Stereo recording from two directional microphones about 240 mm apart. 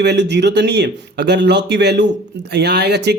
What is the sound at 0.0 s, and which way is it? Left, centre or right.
A man's voice, right.